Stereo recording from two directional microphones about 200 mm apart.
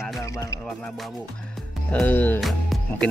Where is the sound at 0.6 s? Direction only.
5° left (ahead or behind).